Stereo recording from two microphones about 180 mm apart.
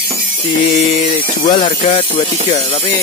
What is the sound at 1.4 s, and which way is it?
Speech, 40° left (ahead or behind).